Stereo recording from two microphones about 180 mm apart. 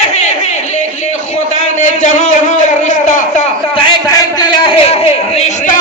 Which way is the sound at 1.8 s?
45° left (ahead or behind).